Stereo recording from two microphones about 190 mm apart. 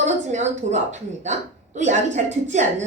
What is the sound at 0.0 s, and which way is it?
A woman's voice, 40° right (ahead or behind).